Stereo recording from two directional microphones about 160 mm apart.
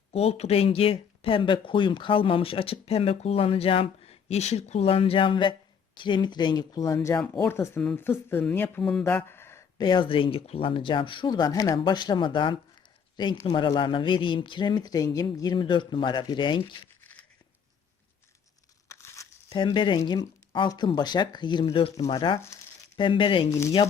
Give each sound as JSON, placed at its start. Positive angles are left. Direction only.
{"t": 0.1, "sound": "speech", "side_deg": 40}
{"t": 17.0, "sound": "a sound", "side_deg": 10}
{"t": 18.9, "sound": "tearing", "side_deg": 20}
{"t": 19.6, "sound": "speech", "side_deg": 30}
{"t": 22.1, "sound": "speech", "side_deg": 30}
{"t": 23.5, "sound": "speech", "side_deg": 20}